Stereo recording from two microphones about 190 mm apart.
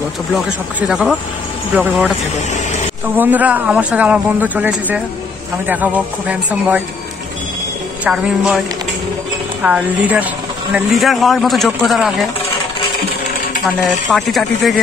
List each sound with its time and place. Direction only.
0.7 s speech: 5° right (ahead or behind)
2.5 s a sound: 40° left (ahead or behind)
3.2 s speech: 10° right (ahead or behind)
8.0 s speech: 5° right (ahead or behind)
9.6 s speech: 5° right (ahead or behind)
14.1 s speech: centre (ahead or behind)